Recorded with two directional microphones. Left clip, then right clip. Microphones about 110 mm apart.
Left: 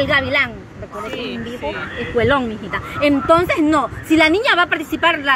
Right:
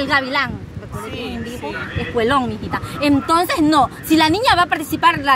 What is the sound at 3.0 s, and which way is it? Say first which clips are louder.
A woman's voice: left 2 dB; 60° right (ahead or behind).